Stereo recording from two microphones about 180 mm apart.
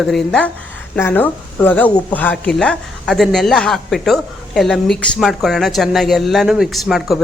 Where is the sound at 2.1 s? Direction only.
10° left (ahead or behind).